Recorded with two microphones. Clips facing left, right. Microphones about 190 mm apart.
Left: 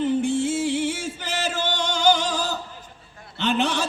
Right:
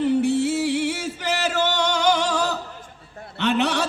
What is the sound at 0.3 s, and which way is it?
Music, 65° right (ahead or behind).